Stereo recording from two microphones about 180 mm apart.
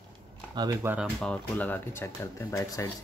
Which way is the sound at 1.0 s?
5° left (ahead or behind).